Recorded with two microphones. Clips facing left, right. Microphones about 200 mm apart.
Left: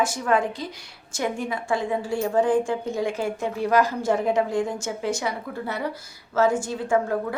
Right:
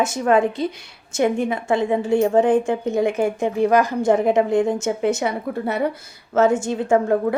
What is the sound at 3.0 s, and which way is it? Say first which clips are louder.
Speech: right 8 dB; 55° right (ahead or behind).